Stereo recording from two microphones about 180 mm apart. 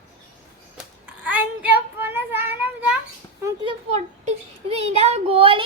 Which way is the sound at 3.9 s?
35° right (ahead or behind).